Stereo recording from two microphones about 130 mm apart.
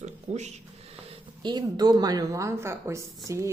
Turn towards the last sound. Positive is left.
turn(degrees=-20)  # may be behind; listen again after turning